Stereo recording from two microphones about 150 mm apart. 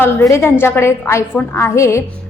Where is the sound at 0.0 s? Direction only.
15° left (ahead or behind).